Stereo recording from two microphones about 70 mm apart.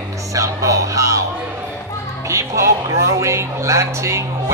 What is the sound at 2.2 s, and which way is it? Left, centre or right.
Speech, right.